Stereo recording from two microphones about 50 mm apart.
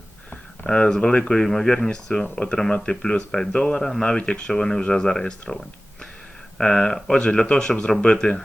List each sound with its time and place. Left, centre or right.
0.6 s speech: centre